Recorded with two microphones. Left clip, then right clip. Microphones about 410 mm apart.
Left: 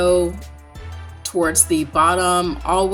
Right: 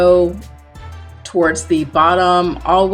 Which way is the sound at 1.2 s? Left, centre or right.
Left.